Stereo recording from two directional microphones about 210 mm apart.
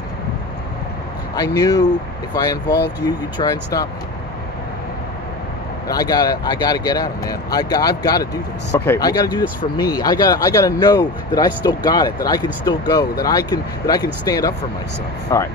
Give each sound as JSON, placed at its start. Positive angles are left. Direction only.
{"t": 1.3, "sound": "speech", "side_deg": 20}
{"t": 5.9, "sound": "speech", "side_deg": 20}